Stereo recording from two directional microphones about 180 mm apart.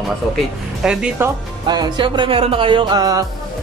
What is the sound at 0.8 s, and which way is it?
Speech, 5° right (ahead or behind).